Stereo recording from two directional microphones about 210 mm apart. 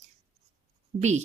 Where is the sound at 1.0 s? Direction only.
35° right (ahead or behind).